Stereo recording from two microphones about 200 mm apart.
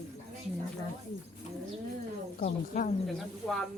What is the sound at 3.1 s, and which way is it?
Speech, centre (ahead or behind).